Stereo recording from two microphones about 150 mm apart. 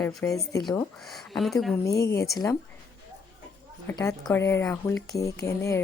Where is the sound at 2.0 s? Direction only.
20° left (ahead or behind).